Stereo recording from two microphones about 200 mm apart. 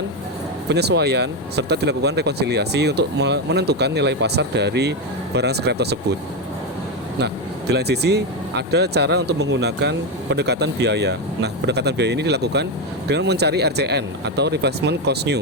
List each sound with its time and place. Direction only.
0.7 s speech: 55° right (ahead or behind)
7.7 s speech: 55° right (ahead or behind)